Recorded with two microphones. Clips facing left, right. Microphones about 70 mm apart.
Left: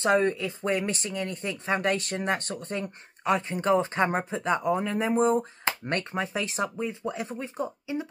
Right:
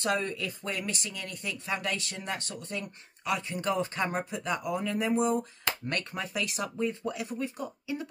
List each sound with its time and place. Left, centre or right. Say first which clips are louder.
0.0 s speech: left 7 dB; left